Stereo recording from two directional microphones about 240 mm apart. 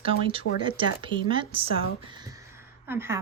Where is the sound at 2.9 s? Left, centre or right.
Centre.